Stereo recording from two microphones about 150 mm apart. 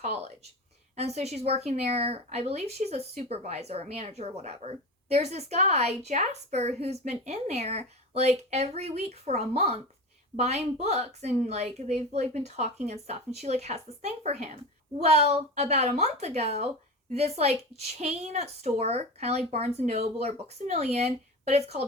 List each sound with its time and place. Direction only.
0.0 s speech: 45° right (ahead or behind)